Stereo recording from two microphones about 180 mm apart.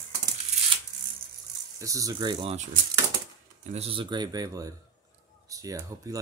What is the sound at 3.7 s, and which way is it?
Speech, 30° right (ahead or behind).